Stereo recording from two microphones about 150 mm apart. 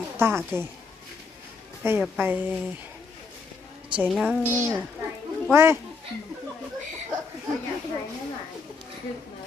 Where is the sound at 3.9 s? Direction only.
Centre (ahead or behind).